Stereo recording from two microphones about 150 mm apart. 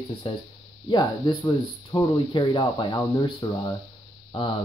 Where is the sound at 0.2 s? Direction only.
35° left (ahead or behind).